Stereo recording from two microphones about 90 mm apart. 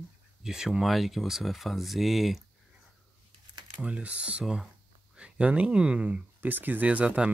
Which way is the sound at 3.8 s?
15° right (ahead or behind).